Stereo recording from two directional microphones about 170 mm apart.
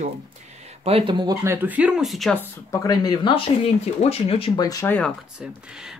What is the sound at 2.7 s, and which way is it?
Speech, 20° left (ahead or behind).